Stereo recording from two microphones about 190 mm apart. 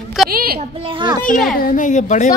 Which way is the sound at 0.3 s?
50° right (ahead or behind).